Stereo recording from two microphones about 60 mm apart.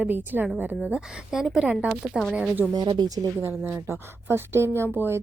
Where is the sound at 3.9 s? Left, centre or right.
Right.